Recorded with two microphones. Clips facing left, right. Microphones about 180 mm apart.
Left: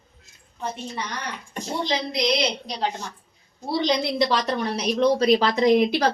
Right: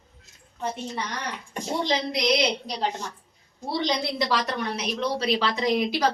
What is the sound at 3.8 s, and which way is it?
A woman's voice, 25° left (ahead or behind).